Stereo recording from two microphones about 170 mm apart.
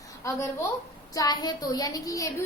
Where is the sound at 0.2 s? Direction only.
20° left (ahead or behind).